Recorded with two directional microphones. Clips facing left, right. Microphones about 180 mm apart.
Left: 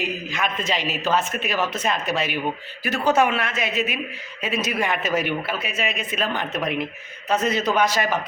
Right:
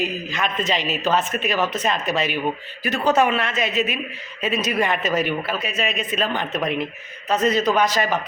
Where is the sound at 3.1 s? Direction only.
5° left (ahead or behind).